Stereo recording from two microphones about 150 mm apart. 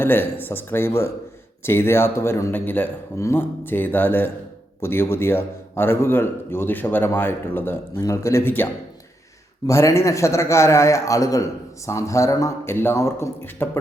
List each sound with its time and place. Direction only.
0.0 s a man's voice: 15° left (ahead or behind)